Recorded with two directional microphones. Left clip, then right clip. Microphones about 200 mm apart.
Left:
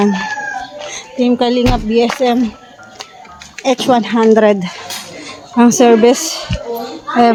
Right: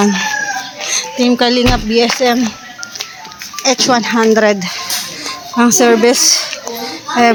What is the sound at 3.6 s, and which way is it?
Speech, 20° left (ahead or behind).